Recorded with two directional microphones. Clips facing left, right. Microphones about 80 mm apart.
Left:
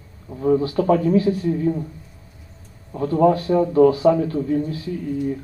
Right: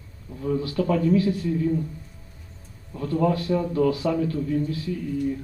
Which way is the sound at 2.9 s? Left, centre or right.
Left.